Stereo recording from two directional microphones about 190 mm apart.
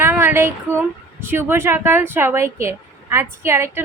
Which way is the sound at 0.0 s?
10° right (ahead or behind).